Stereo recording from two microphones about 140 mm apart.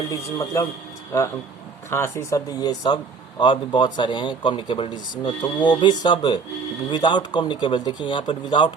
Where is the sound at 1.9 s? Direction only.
20° left (ahead or behind).